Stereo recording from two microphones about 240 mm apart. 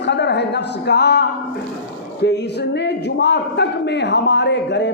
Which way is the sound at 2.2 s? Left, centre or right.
Left.